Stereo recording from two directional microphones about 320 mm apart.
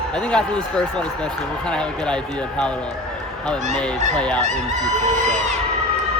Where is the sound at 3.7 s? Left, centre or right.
Right.